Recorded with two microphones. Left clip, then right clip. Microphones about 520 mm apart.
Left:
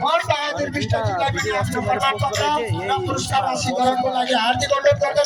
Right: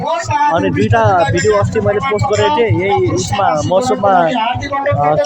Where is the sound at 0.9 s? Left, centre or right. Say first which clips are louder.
Right 12 dB; left.